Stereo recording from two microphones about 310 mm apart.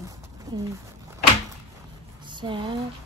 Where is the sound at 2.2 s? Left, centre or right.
Centre.